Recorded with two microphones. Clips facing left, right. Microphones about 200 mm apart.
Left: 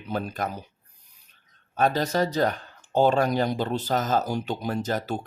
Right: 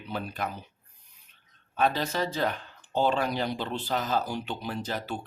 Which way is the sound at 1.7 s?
40° left (ahead or behind).